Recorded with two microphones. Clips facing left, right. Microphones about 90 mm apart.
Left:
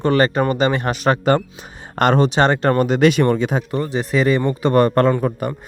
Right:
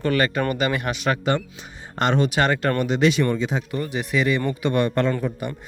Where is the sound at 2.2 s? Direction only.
30° left (ahead or behind); by 3.6 s 55° left (ahead or behind).